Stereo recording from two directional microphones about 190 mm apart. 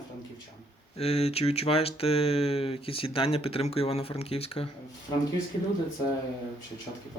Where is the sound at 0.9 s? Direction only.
30° left (ahead or behind).